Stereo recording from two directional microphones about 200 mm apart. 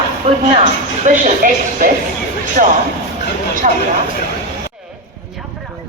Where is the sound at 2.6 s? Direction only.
40° right (ahead or behind).